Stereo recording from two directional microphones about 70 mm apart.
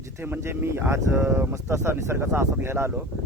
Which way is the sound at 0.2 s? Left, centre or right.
Right.